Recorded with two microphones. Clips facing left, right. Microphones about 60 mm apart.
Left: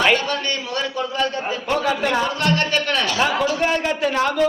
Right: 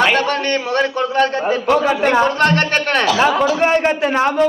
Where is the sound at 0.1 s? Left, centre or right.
Right.